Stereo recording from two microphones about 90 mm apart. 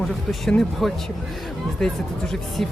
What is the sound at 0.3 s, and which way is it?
Speech, centre (ahead or behind).